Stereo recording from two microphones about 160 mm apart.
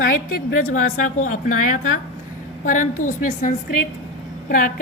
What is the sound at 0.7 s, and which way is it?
A woman's voice, 50° left (ahead or behind).